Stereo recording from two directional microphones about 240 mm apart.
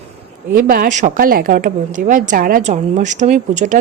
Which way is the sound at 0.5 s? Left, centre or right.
Right.